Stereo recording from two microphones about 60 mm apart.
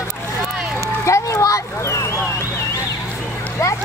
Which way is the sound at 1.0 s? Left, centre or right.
Left.